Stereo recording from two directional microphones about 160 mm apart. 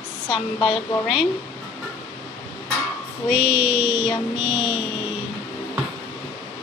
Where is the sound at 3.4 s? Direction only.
30° left (ahead or behind).